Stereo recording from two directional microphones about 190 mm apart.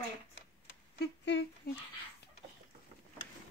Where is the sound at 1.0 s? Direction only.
70° left (ahead or behind).